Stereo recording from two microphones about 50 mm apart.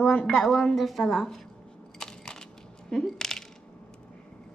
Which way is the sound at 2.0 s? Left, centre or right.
Centre.